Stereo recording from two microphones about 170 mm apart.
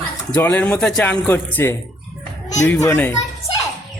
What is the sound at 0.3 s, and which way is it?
Speech, 10° left (ahead or behind).